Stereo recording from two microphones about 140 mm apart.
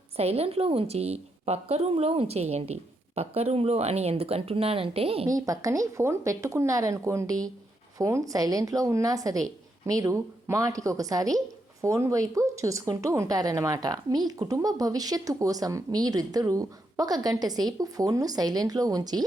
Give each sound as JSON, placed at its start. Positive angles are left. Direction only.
{"t": 0.2, "sound": "a woman's voice", "side_deg": -45}
{"t": 5.3, "sound": "a woman's voice", "side_deg": -25}